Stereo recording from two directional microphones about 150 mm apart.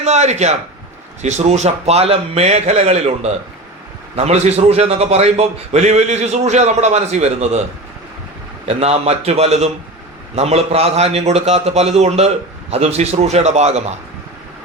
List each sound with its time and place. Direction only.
0.0 s a man's voice: 50° right (ahead or behind)
8.6 s a man's voice: 45° right (ahead or behind)